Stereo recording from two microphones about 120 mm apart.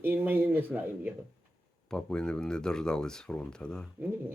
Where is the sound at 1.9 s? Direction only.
5° left (ahead or behind).